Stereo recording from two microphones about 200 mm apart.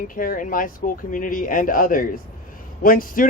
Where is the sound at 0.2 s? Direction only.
45° left (ahead or behind).